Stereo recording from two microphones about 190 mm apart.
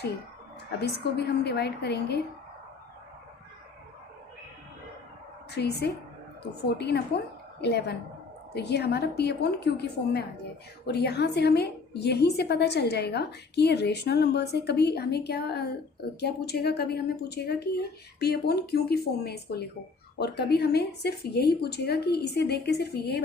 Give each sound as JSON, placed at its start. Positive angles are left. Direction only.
{"t": 1.1, "sound": "a woman's voice", "side_deg": 60}
{"t": 5.5, "sound": "a woman's voice", "side_deg": 60}